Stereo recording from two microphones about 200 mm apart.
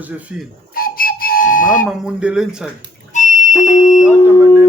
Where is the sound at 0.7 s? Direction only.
45° left (ahead or behind).